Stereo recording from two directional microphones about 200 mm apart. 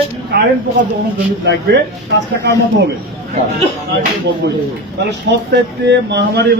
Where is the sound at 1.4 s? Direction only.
55° right (ahead or behind).